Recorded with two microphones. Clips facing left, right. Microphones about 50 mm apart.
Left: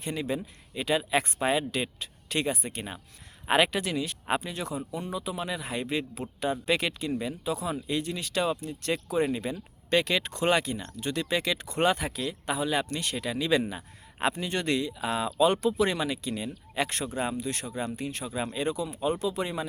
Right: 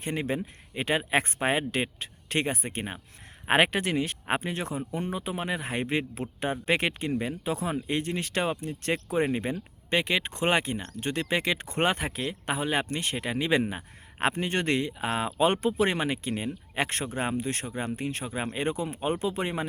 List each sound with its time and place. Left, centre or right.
0.0 s speech: right
9.9 s speech: right